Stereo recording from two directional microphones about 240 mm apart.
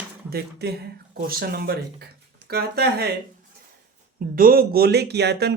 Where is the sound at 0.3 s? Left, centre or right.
Right.